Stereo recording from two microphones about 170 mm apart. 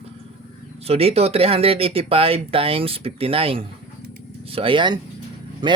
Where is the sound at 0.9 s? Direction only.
35° right (ahead or behind).